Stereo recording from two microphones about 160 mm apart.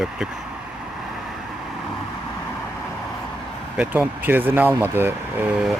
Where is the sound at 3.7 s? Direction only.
10° right (ahead or behind).